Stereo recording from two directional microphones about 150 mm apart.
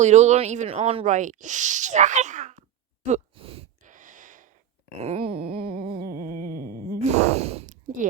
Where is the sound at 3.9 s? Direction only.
60° right (ahead or behind).